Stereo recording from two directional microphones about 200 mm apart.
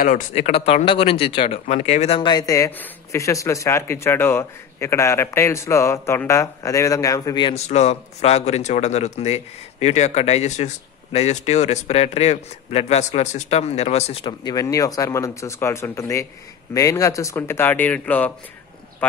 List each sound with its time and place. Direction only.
0.0 s speech: 40° left (ahead or behind)
14.4 s speech: 20° left (ahead or behind)